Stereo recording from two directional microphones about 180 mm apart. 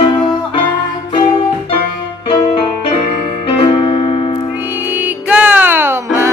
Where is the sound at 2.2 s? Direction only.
25° left (ahead or behind).